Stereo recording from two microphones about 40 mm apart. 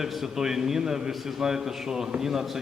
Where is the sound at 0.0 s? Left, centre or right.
Centre.